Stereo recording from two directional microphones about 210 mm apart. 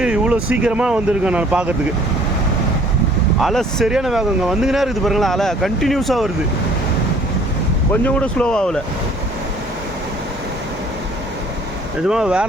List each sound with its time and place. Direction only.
0.0 s speech: 5° right (ahead or behind)
3.4 s speech: centre (ahead or behind)
8.0 s speech: 5° left (ahead or behind)
12.0 s speech: 5° right (ahead or behind)